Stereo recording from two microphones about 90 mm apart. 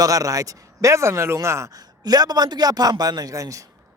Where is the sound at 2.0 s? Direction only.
45° right (ahead or behind).